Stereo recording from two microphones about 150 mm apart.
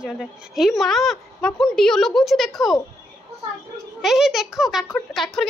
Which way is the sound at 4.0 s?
5° right (ahead or behind).